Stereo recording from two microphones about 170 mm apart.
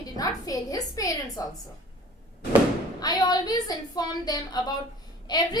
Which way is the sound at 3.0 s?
25° left (ahead or behind).